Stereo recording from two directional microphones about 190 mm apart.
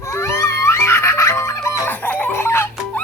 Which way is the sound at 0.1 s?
15° left (ahead or behind).